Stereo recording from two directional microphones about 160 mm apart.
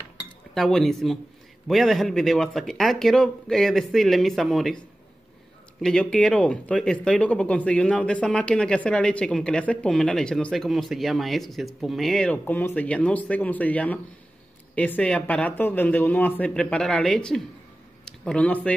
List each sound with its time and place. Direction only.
0.6 s speech: 5° left (ahead or behind)